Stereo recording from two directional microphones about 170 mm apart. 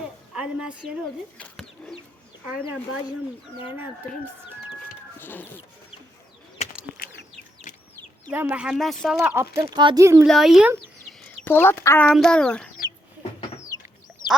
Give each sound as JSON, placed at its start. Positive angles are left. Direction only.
{"t": 0.3, "sound": "a woman's voice", "side_deg": -5}
{"t": 1.4, "sound": "chicken", "side_deg": 5}
{"t": 5.2, "sound": "speech", "side_deg": 10}
{"t": 6.9, "sound": "chicken", "side_deg": 60}
{"t": 8.3, "sound": "speech", "side_deg": -10}
{"t": 9.2, "sound": "speech", "side_deg": -15}
{"t": 10.2, "sound": "speech", "side_deg": 0}
{"t": 11.4, "sound": "speech", "side_deg": 15}
{"t": 12.0, "sound": "speech", "side_deg": 5}